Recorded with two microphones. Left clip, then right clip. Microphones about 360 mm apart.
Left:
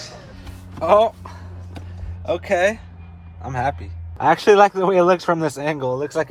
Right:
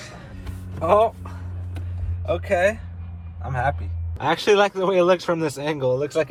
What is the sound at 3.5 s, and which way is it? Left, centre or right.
Speech, left.